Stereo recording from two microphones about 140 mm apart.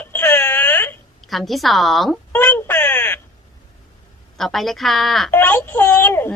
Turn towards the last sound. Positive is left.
turn(degrees=15)  # may be behind; listen again after turning